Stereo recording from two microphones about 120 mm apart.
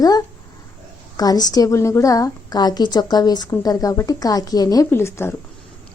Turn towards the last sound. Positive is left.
turn(degrees=20)  # may be behind; listen again after turning